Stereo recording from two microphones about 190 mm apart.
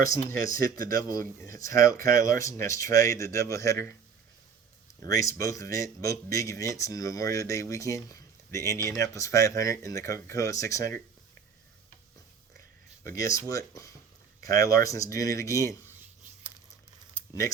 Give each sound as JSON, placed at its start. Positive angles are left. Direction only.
{"t": 0.3, "sound": "speech", "side_deg": 15}
{"t": 5.0, "sound": "speech", "side_deg": 15}
{"t": 13.1, "sound": "speech", "side_deg": 15}